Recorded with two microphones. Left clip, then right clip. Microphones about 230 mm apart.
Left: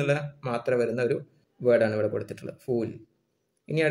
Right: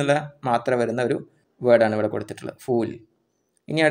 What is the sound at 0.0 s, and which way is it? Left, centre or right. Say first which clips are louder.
A man's voice: right 6 dB; centre.